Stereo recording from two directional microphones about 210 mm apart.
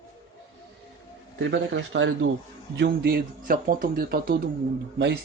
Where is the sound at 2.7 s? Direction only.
50° right (ahead or behind).